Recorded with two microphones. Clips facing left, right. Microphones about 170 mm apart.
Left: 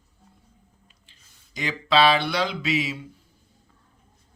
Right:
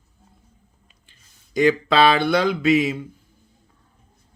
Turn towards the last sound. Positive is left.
turn(degrees=-50)  # may be behind; listen again after turning